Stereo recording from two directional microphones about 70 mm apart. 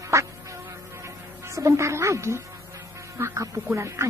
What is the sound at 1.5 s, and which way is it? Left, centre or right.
A man's voice, right.